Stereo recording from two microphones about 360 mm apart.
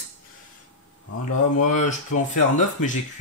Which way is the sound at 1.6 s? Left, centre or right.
Left.